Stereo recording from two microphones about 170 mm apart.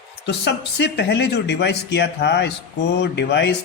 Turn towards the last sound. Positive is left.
turn(degrees=80)